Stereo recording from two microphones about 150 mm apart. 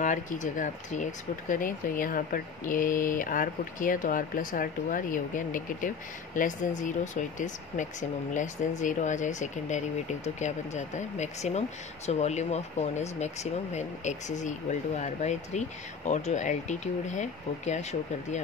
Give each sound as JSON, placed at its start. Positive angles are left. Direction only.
{"t": 0.0, "sound": "speech", "side_deg": 55}